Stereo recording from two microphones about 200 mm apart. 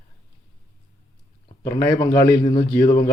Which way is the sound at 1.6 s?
15° left (ahead or behind).